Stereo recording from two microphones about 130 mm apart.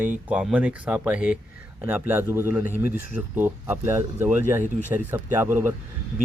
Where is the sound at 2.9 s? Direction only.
90° left.